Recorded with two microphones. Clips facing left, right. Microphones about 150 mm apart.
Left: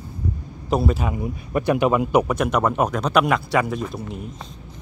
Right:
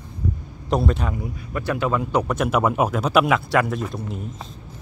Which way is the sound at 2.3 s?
Centre (ahead or behind).